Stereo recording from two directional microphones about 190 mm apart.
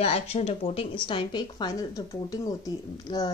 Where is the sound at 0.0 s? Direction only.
30° left (ahead or behind).